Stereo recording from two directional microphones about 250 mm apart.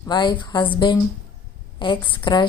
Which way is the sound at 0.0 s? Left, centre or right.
Centre.